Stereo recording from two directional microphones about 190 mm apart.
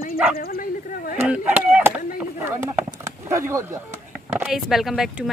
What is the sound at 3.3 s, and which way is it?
Speech, 15° right (ahead or behind).